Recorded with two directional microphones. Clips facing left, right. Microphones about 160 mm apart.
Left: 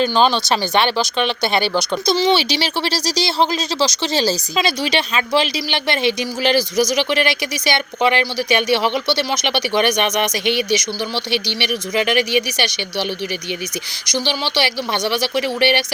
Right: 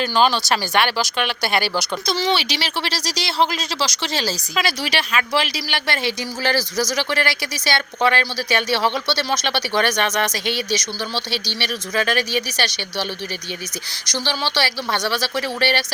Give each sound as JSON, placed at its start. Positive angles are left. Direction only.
{"t": 0.0, "sound": "speech", "side_deg": 25}
{"t": 14.1, "sound": "speech", "side_deg": 15}